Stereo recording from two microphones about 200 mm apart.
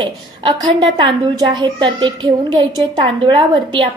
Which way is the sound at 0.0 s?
20° right (ahead or behind).